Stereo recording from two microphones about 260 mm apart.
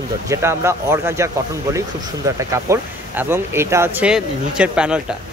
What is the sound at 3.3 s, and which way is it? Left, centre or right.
Speech, centre.